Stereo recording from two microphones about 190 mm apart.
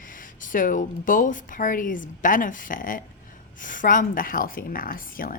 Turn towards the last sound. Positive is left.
turn(degrees=50)  # may be behind; listen again after turning